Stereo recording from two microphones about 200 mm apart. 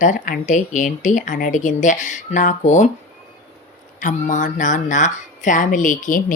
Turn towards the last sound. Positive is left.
turn(degrees=40)  # may be behind; listen again after turning